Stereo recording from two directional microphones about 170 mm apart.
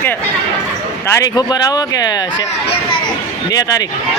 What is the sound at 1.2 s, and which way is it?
Speech, 25° left (ahead or behind).